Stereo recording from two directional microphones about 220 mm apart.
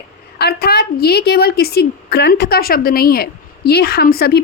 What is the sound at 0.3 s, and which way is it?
A woman's voice, 45° left (ahead or behind).